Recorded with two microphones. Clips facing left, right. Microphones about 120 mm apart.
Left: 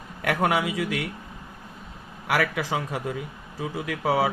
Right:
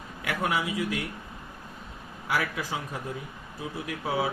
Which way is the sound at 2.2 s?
70° left (ahead or behind).